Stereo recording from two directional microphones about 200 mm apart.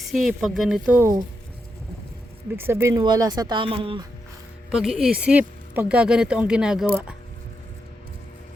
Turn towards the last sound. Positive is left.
turn(degrees=-5)  # may be behind; listen again after turning